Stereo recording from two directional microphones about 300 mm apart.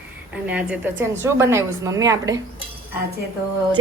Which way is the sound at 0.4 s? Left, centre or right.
Centre.